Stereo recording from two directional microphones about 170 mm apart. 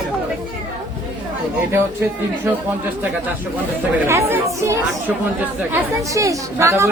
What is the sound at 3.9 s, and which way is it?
A woman's voice, 15° right (ahead or behind).